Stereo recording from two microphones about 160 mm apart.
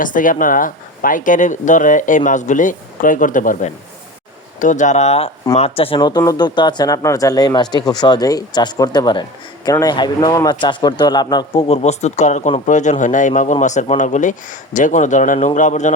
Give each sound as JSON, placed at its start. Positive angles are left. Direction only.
{"t": 0.0, "sound": "a man's voice", "side_deg": 55}
{"t": 11.7, "sound": "a man's voice", "side_deg": 45}